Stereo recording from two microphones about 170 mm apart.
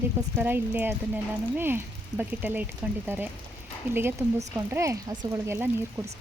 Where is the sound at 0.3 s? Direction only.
10° right (ahead or behind).